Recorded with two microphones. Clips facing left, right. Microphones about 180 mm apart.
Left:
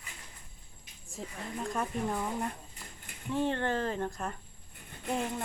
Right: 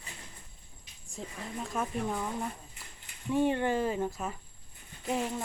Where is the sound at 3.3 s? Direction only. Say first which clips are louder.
Right 3 dB; 10° right (ahead or behind).